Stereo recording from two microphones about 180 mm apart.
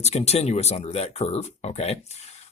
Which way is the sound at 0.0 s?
35° left (ahead or behind).